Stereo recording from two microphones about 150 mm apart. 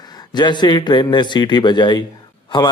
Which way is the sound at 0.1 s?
30° left (ahead or behind).